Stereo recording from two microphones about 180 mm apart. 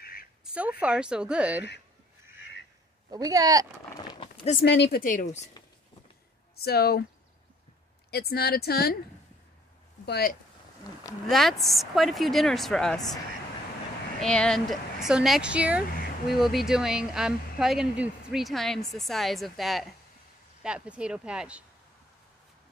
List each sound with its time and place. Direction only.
0.0 s a sound: 55° left (ahead or behind)
0.5 s speech: 10° right (ahead or behind)
3.1 s speech: 20° right (ahead or behind)
3.9 s a sound: 25° left (ahead or behind)
4.6 s speech: 70° left (ahead or behind)
5.0 s speech: 45° left (ahead or behind)
6.5 s a woman's voice: 60° left (ahead or behind)
8.1 s a woman's voice: 60° left (ahead or behind)
10.0 s speech: 60° left (ahead or behind)
11.2 s speech: centre (ahead or behind)
14.2 s speech: 5° left (ahead or behind)